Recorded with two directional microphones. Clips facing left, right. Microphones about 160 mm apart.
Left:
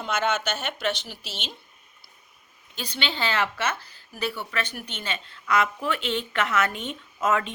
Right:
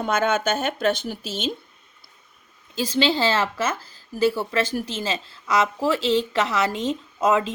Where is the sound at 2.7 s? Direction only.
90° right.